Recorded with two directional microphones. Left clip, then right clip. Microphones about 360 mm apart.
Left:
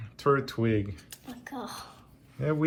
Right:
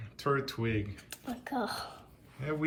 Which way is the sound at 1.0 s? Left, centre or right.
Right.